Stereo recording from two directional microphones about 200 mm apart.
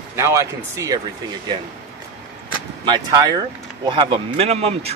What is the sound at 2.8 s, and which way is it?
Speech, 20° right (ahead or behind).